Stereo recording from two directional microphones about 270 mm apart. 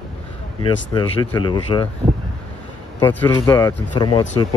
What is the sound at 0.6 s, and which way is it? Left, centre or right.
Speech, centre.